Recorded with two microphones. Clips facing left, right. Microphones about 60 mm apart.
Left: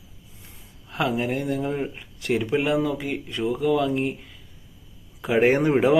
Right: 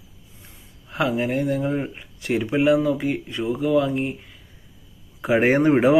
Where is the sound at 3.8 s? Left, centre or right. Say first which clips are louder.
Even; right.